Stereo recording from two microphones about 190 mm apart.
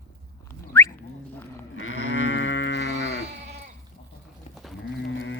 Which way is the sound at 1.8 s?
90° left.